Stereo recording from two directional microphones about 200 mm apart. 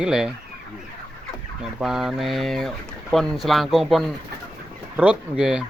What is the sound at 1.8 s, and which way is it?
Speech, centre (ahead or behind).